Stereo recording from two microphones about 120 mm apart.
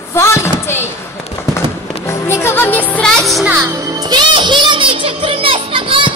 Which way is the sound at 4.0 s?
35° right (ahead or behind).